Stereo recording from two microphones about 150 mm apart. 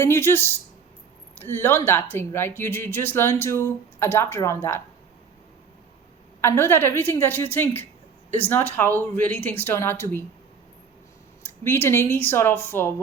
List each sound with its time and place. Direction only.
0.0 s speech: 15° left (ahead or behind)
1.4 s speech: 15° left (ahead or behind)
6.4 s speech: 15° left (ahead or behind)
11.6 s speech: 15° left (ahead or behind)